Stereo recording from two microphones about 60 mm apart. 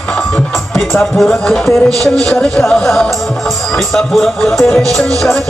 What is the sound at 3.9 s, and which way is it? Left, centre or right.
Speech, centre.